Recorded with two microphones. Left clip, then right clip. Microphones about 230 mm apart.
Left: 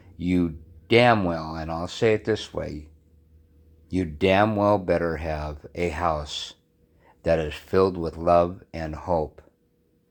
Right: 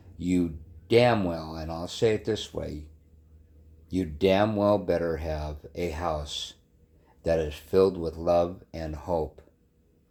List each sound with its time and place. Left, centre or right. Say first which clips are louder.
0.2 s speech: left 3 dB; left
3.8 s speech: left 2 dB; left